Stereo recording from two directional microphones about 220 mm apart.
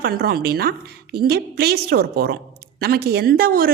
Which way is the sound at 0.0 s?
45° right (ahead or behind).